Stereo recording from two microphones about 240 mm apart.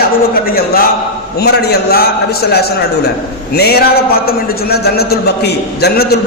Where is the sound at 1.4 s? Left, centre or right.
Left.